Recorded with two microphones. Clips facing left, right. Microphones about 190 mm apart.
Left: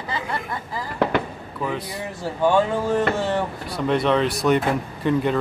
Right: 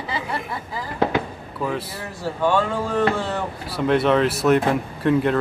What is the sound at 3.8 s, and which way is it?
Speech, centre (ahead or behind).